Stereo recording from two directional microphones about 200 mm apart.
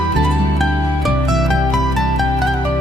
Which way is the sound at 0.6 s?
Centre (ahead or behind).